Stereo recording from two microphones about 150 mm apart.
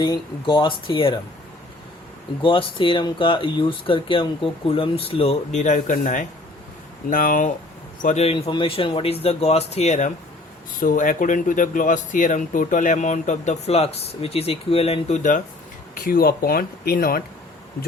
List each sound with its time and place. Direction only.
0.0 s speech: 30° left (ahead or behind)
2.4 s speech: 35° left (ahead or behind); by 7.5 s 60° left (ahead or behind)
8.0 s speech: 45° left (ahead or behind)
8.4 s speech: 35° left (ahead or behind)
10.8 s speech: 60° left (ahead or behind)
16.0 s speech: 75° left (ahead or behind)